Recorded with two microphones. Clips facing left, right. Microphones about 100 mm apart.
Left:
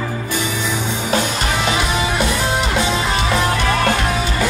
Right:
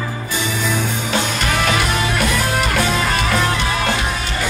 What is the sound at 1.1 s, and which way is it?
Music, 35° left (ahead or behind).